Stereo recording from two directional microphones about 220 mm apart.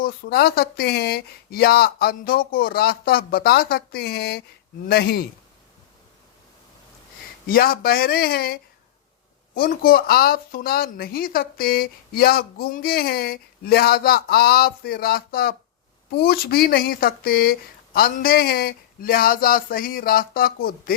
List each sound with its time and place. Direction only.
0.0 s speech: 45° left (ahead or behind)
7.4 s speech: 40° left (ahead or behind)